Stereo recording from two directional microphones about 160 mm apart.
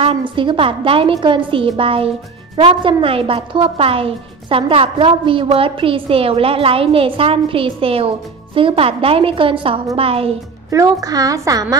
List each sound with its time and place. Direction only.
0.0 s speech: 30° right (ahead or behind)
10.7 s a woman's voice: 20° right (ahead or behind)